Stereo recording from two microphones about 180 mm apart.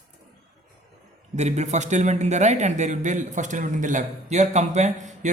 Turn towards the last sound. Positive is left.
turn(degrees=-40)  # may be behind; listen again after turning